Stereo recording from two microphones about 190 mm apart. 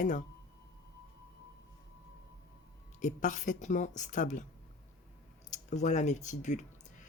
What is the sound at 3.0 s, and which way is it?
Speech, 40° left (ahead or behind).